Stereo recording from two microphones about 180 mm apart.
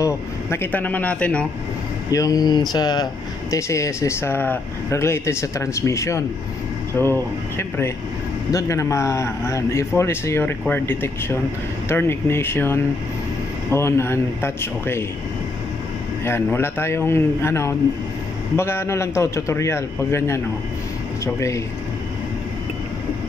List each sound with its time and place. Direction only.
0.0 s speech: 15° left (ahead or behind)
2.0 s speech: 20° left (ahead or behind)
16.3 s speech: 15° left (ahead or behind)